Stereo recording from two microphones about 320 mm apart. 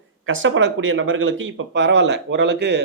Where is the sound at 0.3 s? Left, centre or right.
Right.